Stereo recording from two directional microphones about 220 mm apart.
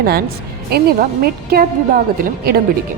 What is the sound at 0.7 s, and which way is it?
A woman's voice, 45° right (ahead or behind).